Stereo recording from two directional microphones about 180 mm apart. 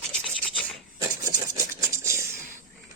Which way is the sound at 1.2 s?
15° right (ahead or behind).